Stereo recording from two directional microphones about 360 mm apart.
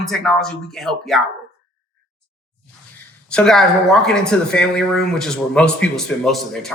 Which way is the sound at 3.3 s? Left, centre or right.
Centre.